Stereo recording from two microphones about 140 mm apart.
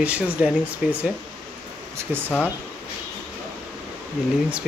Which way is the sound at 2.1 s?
15° right (ahead or behind).